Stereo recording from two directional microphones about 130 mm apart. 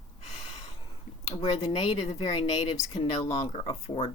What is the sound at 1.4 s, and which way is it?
Speech, 50° left (ahead or behind).